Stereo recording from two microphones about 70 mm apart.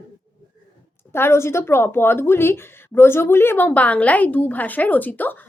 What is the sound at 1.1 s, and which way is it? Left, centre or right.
A woman's voice, left.